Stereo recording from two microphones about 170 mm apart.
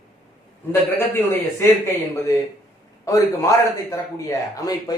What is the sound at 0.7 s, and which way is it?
Speech, 15° left (ahead or behind).